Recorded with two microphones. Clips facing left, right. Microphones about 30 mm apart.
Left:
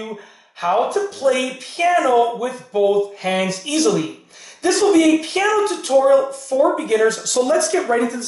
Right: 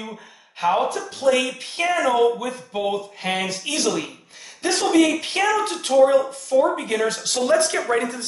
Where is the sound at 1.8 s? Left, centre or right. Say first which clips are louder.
Left 4 dB; centre.